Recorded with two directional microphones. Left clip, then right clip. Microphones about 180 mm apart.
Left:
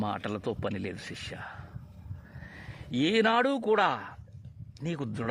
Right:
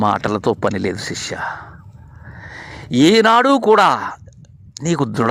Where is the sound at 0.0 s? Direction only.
45° right (ahead or behind).